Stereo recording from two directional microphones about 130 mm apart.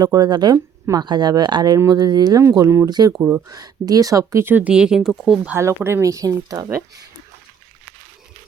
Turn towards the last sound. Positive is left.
turn(degrees=-25)  # may be behind; listen again after turning